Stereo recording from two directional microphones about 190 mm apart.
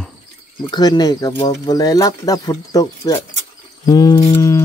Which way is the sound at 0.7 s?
20° left (ahead or behind).